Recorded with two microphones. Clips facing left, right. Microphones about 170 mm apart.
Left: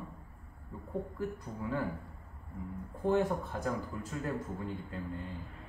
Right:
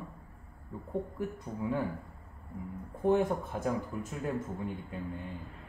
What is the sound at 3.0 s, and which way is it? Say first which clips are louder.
A man's voice: right 2 dB; 15° right (ahead or behind).